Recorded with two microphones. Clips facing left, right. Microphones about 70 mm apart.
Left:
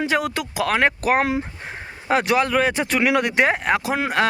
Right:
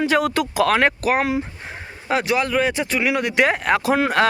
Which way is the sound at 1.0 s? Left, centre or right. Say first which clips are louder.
Even; left.